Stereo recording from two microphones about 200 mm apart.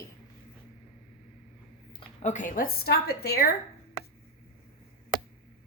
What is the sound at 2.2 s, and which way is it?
A woman's voice, 40° left (ahead or behind).